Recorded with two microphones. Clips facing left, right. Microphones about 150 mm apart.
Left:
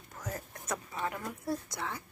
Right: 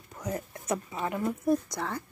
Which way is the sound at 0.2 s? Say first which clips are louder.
Right 7 dB; 20° right (ahead or behind).